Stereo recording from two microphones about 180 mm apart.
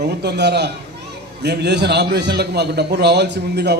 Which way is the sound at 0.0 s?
65° right (ahead or behind).